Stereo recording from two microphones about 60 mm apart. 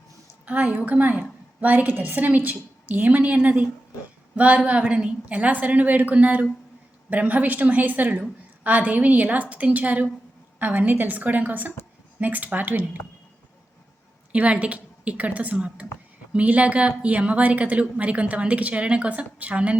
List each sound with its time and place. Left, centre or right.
0.4 s a woman's voice: right
14.3 s a woman's voice: right